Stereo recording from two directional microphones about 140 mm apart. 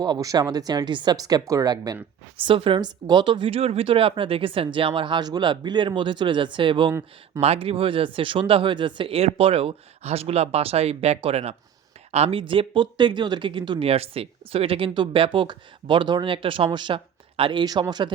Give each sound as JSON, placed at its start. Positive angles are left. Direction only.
{"t": 0.0, "sound": "speech", "side_deg": -25}
{"t": 2.4, "sound": "speech", "side_deg": -40}